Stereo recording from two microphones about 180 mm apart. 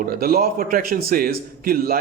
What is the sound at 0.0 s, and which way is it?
Speech, 55° right (ahead or behind).